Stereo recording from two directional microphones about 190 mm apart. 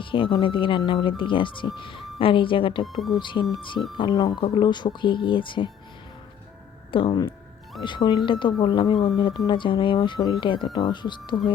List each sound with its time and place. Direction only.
0.0 s speech: 25° left (ahead or behind)
6.9 s speech: 25° left (ahead or behind)